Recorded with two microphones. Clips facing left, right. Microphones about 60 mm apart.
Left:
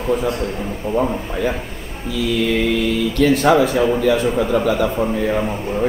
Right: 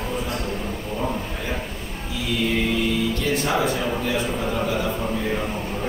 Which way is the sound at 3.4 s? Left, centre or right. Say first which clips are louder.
Left 8 dB; left.